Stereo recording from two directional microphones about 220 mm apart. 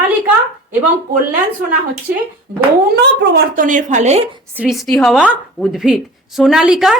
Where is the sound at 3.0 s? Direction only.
50° right (ahead or behind); by 4.4 s 30° right (ahead or behind).